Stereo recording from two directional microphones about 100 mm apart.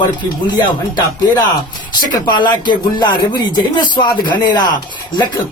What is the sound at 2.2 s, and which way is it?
Speech, 45° left (ahead or behind).